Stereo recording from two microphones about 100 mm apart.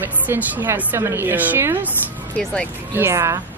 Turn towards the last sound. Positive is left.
turn(degrees=-30)  # may be behind; listen again after turning